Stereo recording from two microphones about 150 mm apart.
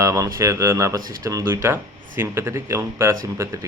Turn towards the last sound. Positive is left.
turn(degrees=-20)  # may be behind; listen again after turning